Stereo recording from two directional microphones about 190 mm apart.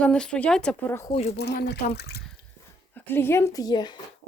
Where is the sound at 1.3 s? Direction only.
65° left (ahead or behind).